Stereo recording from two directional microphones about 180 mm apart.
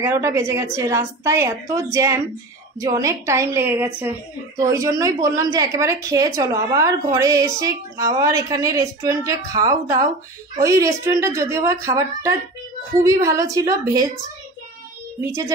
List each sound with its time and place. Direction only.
0.0 s a woman's voice: 15° right (ahead or behind)